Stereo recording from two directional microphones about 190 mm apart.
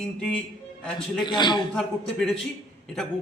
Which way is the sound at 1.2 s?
25° left (ahead or behind).